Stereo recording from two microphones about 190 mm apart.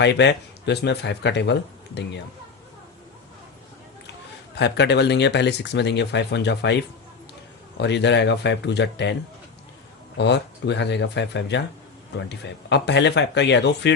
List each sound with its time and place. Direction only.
0.0 s speech: 65° left (ahead or behind)
4.5 s speech: 60° left (ahead or behind)
10.2 s speech: 65° left (ahead or behind)